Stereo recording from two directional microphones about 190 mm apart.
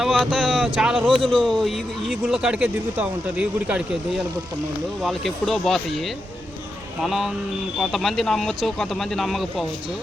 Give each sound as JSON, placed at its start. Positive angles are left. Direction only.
{"t": 0.0, "sound": "speech", "side_deg": 0}
{"t": 1.0, "sound": "speech", "side_deg": -25}
{"t": 1.3, "sound": "speech", "side_deg": 0}
{"t": 5.0, "sound": "speech", "side_deg": 0}
{"t": 7.0, "sound": "speech", "side_deg": 0}